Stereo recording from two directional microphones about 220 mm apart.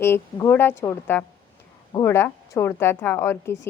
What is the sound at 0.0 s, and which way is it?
A woman's voice, 10° left (ahead or behind).